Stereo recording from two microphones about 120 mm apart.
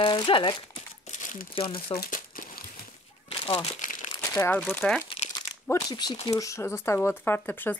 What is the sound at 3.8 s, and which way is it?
Crumpling, 90° left.